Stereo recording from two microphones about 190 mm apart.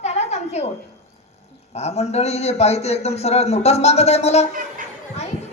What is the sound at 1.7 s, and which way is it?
A man's voice, 35° left (ahead or behind).